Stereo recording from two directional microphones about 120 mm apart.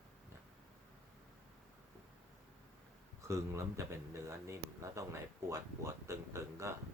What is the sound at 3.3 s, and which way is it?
Speech, 25° right (ahead or behind).